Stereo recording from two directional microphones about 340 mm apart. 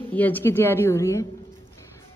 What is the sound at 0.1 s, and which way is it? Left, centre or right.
Speech, centre.